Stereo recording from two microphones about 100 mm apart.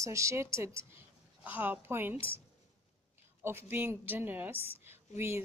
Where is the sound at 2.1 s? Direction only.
65° left (ahead or behind).